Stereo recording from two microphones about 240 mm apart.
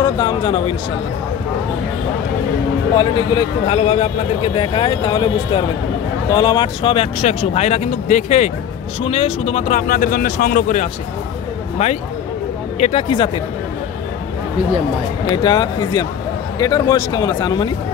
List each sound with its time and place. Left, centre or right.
0.0 s speech: centre
3.0 s speech: left
12.8 s speech: left
15.3 s speech: centre